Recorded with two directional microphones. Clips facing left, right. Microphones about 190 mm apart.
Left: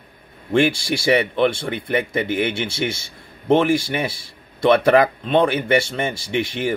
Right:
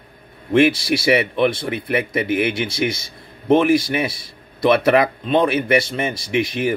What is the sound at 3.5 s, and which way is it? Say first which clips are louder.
Speech: right 2 dB; 5° right (ahead or behind).